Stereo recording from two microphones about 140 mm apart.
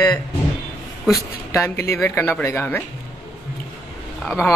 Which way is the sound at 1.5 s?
20° left (ahead or behind).